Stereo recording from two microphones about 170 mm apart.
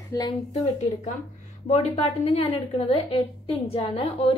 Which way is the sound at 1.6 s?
40° left (ahead or behind).